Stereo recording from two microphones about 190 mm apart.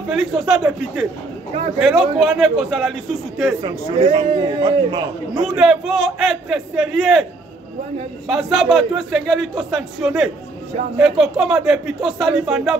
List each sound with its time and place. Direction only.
0.1 s a man's voice: centre (ahead or behind)
1.8 s a man's voice: centre (ahead or behind)
3.6 s a man's voice: 25° right (ahead or behind)
5.6 s a man's voice: centre (ahead or behind)
8.3 s a man's voice: centre (ahead or behind)